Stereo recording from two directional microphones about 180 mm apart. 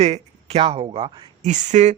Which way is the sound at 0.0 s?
35° right (ahead or behind).